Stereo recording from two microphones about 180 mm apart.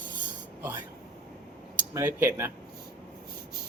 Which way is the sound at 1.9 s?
15° right (ahead or behind).